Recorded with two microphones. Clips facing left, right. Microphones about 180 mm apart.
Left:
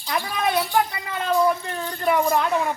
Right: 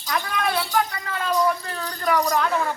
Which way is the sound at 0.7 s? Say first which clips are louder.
Left 1 dB; 25° left (ahead or behind).